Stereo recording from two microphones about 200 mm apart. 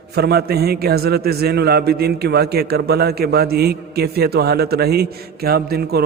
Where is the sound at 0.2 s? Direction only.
55° right (ahead or behind).